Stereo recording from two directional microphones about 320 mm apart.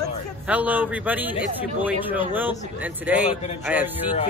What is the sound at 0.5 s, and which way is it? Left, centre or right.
A man's voice, centre.